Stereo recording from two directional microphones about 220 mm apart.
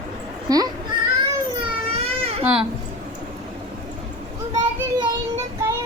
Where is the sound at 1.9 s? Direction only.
25° right (ahead or behind).